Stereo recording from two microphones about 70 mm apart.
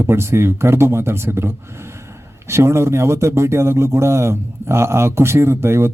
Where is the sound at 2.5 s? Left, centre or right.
Right.